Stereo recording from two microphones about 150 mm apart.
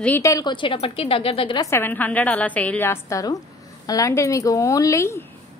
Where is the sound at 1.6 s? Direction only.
15° left (ahead or behind).